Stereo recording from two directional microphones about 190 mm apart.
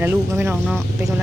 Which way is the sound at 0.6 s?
Centre (ahead or behind).